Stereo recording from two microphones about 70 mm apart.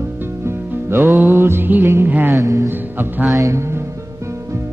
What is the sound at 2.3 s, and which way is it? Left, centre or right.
Music, right.